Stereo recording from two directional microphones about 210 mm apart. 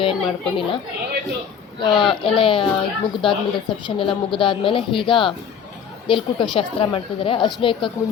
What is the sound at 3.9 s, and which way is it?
A woman's voice, 25° left (ahead or behind).